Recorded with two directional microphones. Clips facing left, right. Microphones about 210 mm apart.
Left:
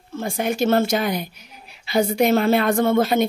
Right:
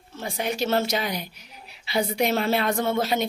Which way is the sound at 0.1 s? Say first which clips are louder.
Left 5 dB; 50° left (ahead or behind).